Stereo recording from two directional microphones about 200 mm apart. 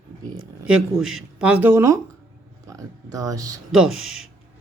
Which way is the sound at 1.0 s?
Centre (ahead or behind).